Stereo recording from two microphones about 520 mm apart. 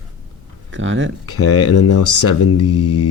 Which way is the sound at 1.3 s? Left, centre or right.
Left.